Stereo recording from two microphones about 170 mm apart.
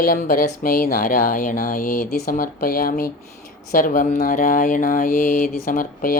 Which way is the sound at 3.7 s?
55° left (ahead or behind).